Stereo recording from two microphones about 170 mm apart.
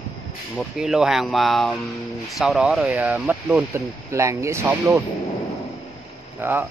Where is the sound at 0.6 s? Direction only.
Centre (ahead or behind).